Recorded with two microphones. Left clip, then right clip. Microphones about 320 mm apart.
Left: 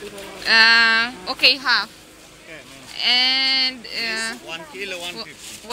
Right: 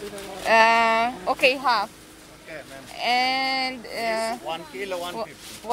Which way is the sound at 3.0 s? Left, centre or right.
Centre.